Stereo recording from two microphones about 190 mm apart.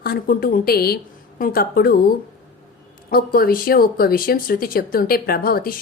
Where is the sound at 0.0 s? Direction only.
50° left (ahead or behind).